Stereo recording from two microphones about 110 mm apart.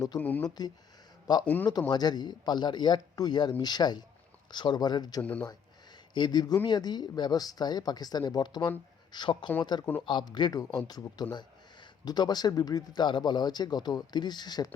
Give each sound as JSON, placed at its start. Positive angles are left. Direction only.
{"t": 0.2, "sound": "speech", "side_deg": 15}
{"t": 0.4, "sound": "speech", "side_deg": 40}
{"t": 1.5, "sound": "speech", "side_deg": 15}
{"t": 1.9, "sound": "speech", "side_deg": 40}